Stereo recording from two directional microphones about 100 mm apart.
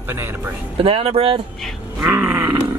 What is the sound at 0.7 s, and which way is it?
Speech, 70° right (ahead or behind).